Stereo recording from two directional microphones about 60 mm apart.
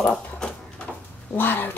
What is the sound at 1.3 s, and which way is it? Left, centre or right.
Speech, left.